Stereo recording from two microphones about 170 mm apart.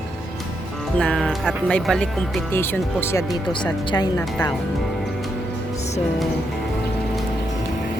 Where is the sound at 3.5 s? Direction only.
25° left (ahead or behind).